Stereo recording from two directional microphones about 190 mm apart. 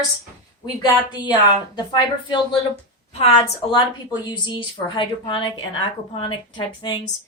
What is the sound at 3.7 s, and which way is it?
Speech, 20° left (ahead or behind).